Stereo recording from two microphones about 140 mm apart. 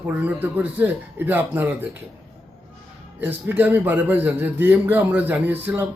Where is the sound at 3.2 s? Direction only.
10° right (ahead or behind).